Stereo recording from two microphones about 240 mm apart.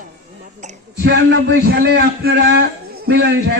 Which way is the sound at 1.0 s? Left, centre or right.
Right.